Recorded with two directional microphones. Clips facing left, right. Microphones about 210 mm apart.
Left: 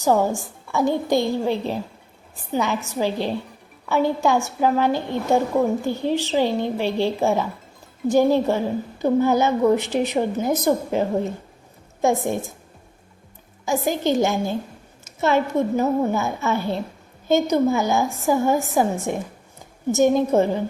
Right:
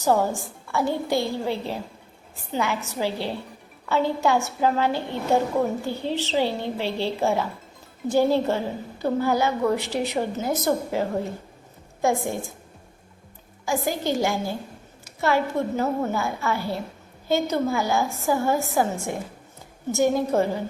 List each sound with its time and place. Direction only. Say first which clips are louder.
0.0 s a woman's voice: left 2 dB; 15° left (ahead or behind)
13.7 s a woman's voice: left 4 dB; 20° left (ahead or behind)